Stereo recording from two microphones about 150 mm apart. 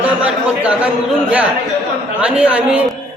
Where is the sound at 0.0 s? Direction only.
10° right (ahead or behind).